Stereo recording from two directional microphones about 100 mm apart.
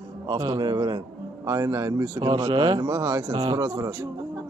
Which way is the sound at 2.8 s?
30° right (ahead or behind).